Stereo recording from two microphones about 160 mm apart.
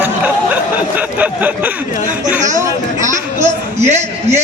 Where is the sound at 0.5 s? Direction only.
10° right (ahead or behind).